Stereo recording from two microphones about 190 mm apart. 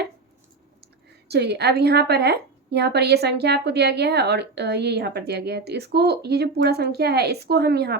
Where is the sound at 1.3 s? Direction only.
60° right (ahead or behind).